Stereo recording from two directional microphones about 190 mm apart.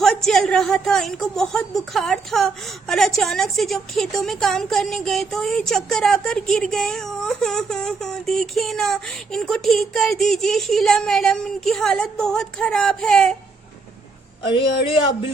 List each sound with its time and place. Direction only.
0.0 s a woman's voice: centre (ahead or behind)
14.4 s speech: 25° left (ahead or behind)